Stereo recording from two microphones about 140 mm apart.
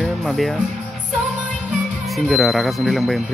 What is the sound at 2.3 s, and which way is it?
Speech, centre (ahead or behind).